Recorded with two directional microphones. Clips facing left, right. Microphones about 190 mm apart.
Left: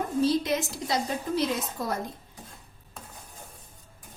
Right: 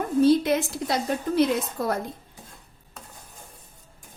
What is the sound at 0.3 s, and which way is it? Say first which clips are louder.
A woman's voice: right 6 dB; 55° right (ahead or behind).